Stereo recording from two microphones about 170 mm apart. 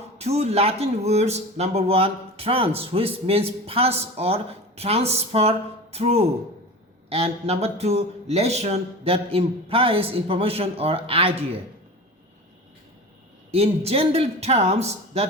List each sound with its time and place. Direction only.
0.2 s speech: 40° right (ahead or behind)
13.5 s speech: 35° right (ahead or behind)